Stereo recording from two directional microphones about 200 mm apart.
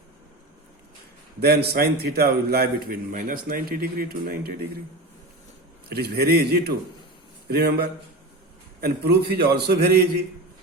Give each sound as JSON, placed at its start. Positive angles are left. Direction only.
{"t": 1.4, "sound": "a man's voice", "side_deg": -55}
{"t": 5.9, "sound": "a man's voice", "side_deg": -50}